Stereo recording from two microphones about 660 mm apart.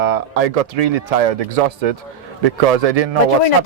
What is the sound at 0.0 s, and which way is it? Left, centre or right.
A man's voice, right.